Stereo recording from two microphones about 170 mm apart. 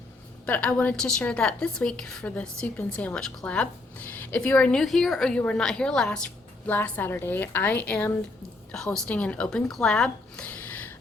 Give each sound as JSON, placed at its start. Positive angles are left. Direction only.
{"t": 0.4, "sound": "a woman's voice", "side_deg": 10}